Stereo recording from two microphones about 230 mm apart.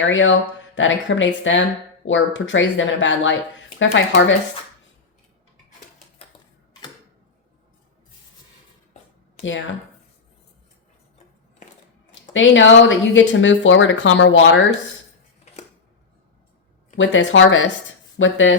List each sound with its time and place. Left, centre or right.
0.1 s speech: left
9.4 s speech: left
12.3 s speech: left
17.0 s speech: left